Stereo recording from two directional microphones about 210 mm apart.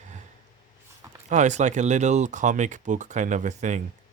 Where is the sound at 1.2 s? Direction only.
35° right (ahead or behind).